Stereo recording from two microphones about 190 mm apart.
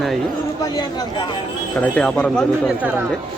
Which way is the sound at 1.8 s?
5° left (ahead or behind).